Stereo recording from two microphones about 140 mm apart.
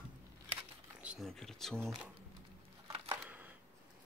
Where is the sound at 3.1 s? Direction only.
10° right (ahead or behind).